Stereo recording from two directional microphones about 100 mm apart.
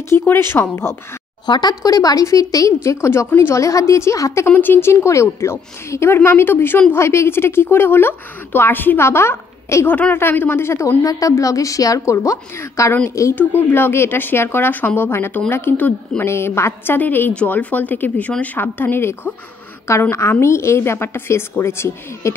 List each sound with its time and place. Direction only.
0.1 s a woman's voice: 25° left (ahead or behind)
1.4 s speech: 45° left (ahead or behind)
4.5 s a woman's voice: 20° left (ahead or behind)
13.3 s a woman's voice: 20° left (ahead or behind)